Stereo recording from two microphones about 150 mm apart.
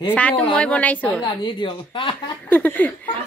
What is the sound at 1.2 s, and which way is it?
A woman's voice, 30° left (ahead or behind).